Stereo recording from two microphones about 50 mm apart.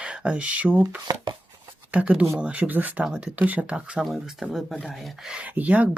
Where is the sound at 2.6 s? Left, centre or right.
Right.